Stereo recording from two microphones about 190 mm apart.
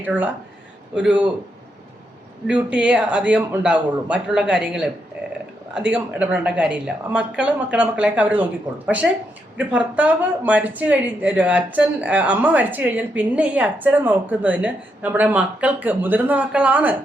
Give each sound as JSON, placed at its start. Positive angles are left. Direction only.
{"t": 0.0, "sound": "a man's voice", "side_deg": -10}
{"t": 2.5, "sound": "a man's voice", "side_deg": -5}